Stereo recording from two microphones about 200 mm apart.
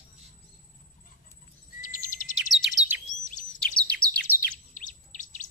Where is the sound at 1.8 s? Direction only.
40° left (ahead or behind).